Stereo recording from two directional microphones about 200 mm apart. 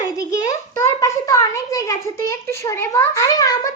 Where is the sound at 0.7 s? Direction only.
15° left (ahead or behind).